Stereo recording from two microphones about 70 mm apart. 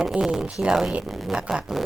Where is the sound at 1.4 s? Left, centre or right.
Centre.